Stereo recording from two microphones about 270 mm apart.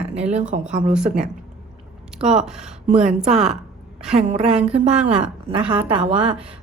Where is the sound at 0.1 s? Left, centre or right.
Right.